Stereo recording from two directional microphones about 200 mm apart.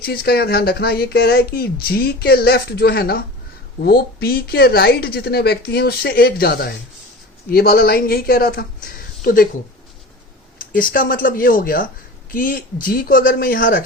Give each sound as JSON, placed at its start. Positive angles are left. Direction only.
{"t": 0.0, "sound": "speech", "side_deg": 50}
{"t": 10.8, "sound": "speech", "side_deg": 45}